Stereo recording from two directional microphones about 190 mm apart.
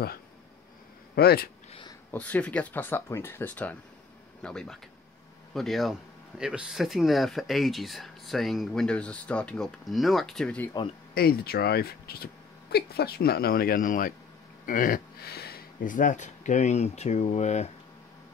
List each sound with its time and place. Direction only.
1.1 s speech: 55° left (ahead or behind)
1.7 s a sound: 25° left (ahead or behind)
2.0 s speech: 10° left (ahead or behind)
11.1 s speech: 55° left (ahead or behind); by 17.6 s 35° left (ahead or behind)